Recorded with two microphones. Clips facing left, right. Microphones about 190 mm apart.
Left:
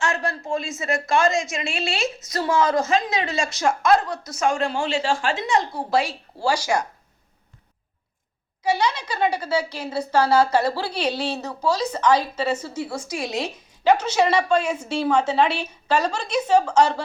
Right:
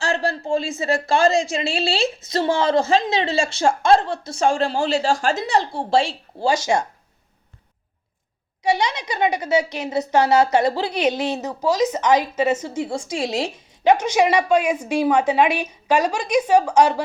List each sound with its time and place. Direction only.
0.0 s a woman's voice: 30° right (ahead or behind)
8.7 s a woman's voice: 20° right (ahead or behind)